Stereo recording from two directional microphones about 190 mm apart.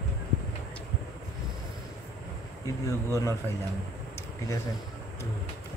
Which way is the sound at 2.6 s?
15° left (ahead or behind).